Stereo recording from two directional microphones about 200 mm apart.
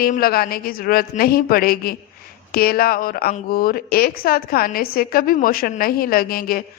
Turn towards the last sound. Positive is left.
turn(degrees=45)  # may be behind; listen again after turning